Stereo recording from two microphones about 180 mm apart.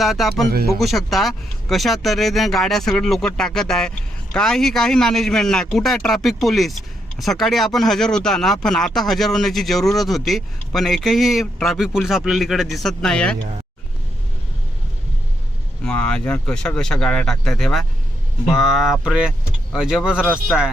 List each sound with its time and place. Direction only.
0.0 s speech: centre (ahead or behind)
15.8 s speech: 5° left (ahead or behind)